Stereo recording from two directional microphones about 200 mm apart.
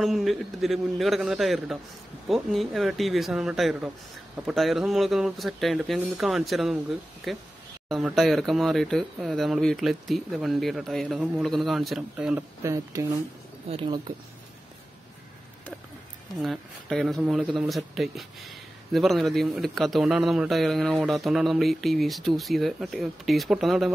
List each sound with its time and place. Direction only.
0.0 s speech: centre (ahead or behind); by 14.1 s 20° right (ahead or behind)
16.3 s speech: centre (ahead or behind)